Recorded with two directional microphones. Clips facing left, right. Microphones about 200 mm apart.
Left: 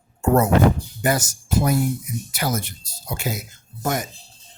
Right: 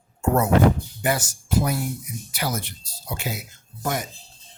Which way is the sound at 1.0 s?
45° left (ahead or behind).